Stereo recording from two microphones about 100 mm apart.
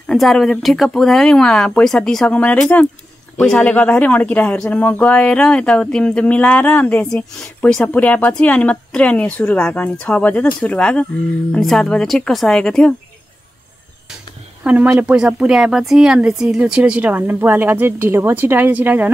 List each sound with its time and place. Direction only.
0.0 s speech: 5° left (ahead or behind)
14.6 s speech: 15° right (ahead or behind)